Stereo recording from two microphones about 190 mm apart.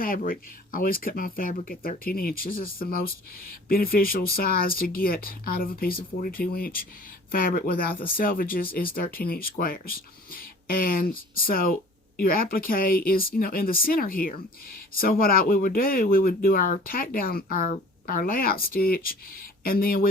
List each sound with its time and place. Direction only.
0.0 s speech: 50° left (ahead or behind)